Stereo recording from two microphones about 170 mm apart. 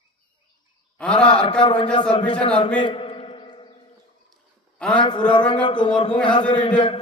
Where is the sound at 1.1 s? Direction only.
25° left (ahead or behind).